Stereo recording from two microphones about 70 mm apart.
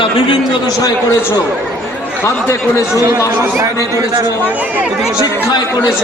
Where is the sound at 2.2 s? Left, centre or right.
Left.